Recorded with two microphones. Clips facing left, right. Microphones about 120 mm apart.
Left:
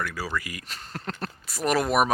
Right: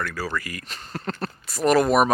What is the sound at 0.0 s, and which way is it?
Speech, 10° left (ahead or behind).